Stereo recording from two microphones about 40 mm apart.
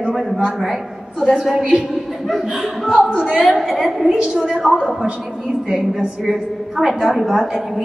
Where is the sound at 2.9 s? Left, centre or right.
Right.